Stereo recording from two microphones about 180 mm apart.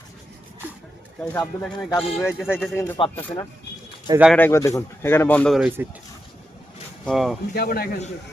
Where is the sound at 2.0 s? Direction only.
5° right (ahead or behind).